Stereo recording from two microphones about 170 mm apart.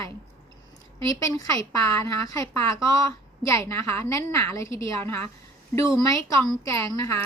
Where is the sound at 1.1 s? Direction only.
20° left (ahead or behind).